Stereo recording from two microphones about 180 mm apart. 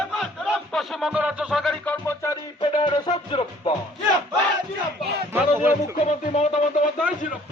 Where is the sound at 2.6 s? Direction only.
30° left (ahead or behind).